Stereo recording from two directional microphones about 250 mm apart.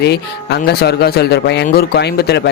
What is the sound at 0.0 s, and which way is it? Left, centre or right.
Speech, left.